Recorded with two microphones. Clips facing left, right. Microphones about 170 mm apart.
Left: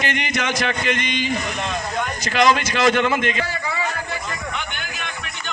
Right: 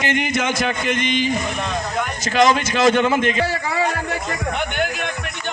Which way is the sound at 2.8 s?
5° right (ahead or behind).